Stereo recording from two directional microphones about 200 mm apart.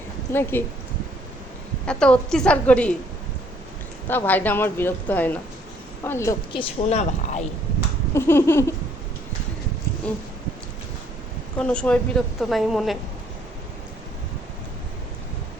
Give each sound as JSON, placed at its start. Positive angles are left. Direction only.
{"t": 0.3, "sound": "a woman's voice", "side_deg": 15}
{"t": 1.9, "sound": "a woman's voice", "side_deg": 5}
{"t": 4.1, "sound": "a woman's voice", "side_deg": 10}
{"t": 6.5, "sound": "speech", "side_deg": 25}
{"t": 8.1, "sound": "a woman's voice", "side_deg": 10}
{"t": 11.5, "sound": "a woman's voice", "side_deg": 5}